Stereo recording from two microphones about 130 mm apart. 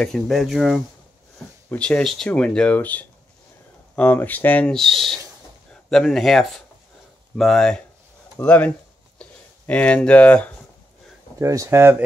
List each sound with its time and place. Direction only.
0.0 s speech: 5° left (ahead or behind)
11.3 s speech: 25° right (ahead or behind)